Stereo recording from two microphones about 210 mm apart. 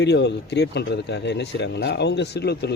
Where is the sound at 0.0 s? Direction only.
55° left (ahead or behind).